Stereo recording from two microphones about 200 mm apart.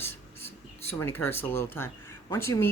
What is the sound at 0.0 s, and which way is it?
Speech, 10° left (ahead or behind).